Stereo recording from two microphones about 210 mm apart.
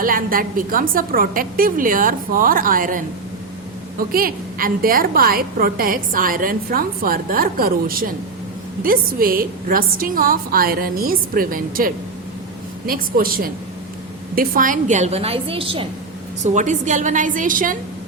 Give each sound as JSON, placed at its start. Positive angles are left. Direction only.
{"t": 0.0, "sound": "a woman's voice", "side_deg": -40}
{"t": 4.1, "sound": "a woman's voice", "side_deg": -45}
{"t": 16.4, "sound": "a woman's voice", "side_deg": -35}